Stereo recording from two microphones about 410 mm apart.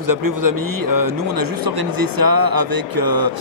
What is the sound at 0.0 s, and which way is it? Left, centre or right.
Speech, right.